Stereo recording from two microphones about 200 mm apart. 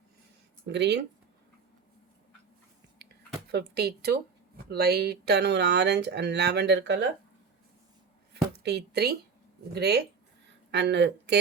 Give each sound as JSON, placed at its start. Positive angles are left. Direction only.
{"t": 0.7, "sound": "a woman's voice", "side_deg": -60}
{"t": 3.5, "sound": "a woman's voice", "side_deg": -55}
{"t": 8.3, "sound": "a woman's voice", "side_deg": -55}